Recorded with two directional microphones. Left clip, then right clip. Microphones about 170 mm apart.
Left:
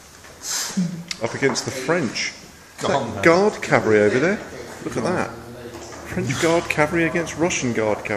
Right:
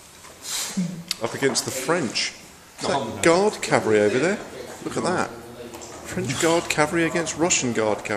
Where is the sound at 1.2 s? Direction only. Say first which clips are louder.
Left 2 dB; 15° right (ahead or behind).